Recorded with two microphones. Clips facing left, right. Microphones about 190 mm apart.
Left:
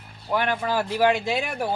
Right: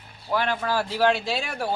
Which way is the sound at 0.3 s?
15° left (ahead or behind).